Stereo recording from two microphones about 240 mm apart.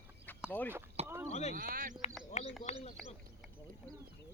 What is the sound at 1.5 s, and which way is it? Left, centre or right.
Speech, right.